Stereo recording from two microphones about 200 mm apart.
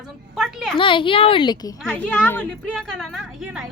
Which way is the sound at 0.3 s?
Centre (ahead or behind).